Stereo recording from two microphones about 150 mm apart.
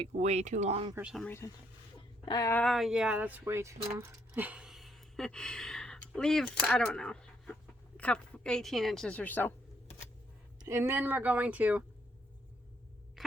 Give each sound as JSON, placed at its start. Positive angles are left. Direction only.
{"t": 0.1, "sound": "speech", "side_deg": -50}
{"t": 2.2, "sound": "speech", "side_deg": 25}
{"t": 2.5, "sound": "a woman's voice", "side_deg": 10}
{"t": 2.7, "sound": "a woman's voice", "side_deg": -5}
{"t": 10.6, "sound": "speech", "side_deg": -20}
{"t": 13.2, "sound": "music", "side_deg": 0}